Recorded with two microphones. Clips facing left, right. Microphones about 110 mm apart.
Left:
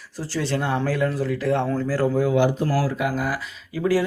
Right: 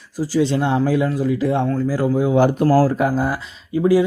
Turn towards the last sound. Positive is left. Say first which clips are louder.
# right 6 dB
turn(degrees=-25)  # may be behind; listen again after turning